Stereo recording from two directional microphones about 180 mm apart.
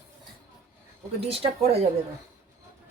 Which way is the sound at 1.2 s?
30° right (ahead or behind).